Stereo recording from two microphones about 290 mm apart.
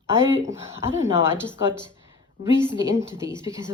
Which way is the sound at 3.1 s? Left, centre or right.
Centre.